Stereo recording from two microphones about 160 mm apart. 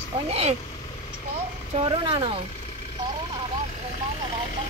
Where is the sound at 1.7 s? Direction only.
35° right (ahead or behind).